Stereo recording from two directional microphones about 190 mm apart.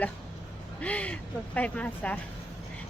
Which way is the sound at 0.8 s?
5° left (ahead or behind).